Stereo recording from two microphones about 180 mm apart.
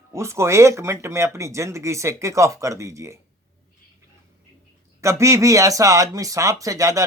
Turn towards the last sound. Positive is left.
turn(degrees=-20)  # may be behind; listen again after turning